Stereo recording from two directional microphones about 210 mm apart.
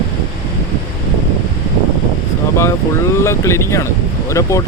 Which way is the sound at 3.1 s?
15° left (ahead or behind).